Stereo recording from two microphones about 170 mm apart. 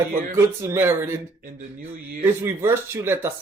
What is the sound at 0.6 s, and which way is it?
Speech, 15° right (ahead or behind).